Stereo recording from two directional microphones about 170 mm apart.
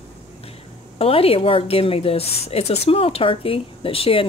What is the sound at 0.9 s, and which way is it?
Speech, 35° left (ahead or behind).